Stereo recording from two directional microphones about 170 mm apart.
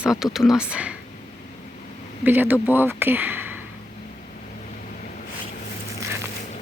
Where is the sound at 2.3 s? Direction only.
10° right (ahead or behind).